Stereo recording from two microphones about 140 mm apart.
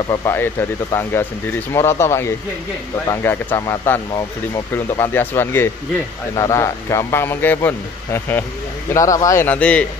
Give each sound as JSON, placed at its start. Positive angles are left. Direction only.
{"t": 0.3, "sound": "speech", "side_deg": 15}
{"t": 9.5, "sound": "speech", "side_deg": 10}